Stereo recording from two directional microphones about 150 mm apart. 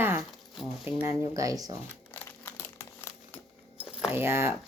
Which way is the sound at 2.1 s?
15° left (ahead or behind).